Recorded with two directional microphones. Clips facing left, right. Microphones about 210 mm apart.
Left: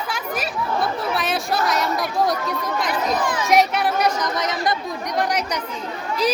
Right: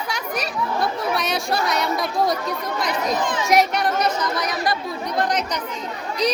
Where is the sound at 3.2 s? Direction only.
20° right (ahead or behind).